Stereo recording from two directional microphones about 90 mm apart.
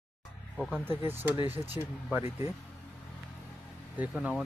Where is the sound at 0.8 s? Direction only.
25° right (ahead or behind).